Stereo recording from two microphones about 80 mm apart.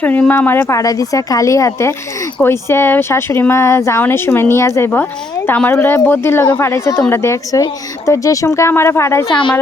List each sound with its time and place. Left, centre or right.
0.0 s speech: left
0.7 s a woman's voice: left
5.7 s speech: left
9.2 s a woman's voice: left